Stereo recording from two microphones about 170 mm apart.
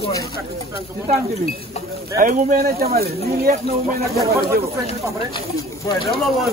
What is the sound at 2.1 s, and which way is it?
Speech, 50° right (ahead or behind).